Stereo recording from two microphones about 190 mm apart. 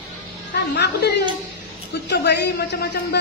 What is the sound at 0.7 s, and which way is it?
Speech, 60° left (ahead or behind).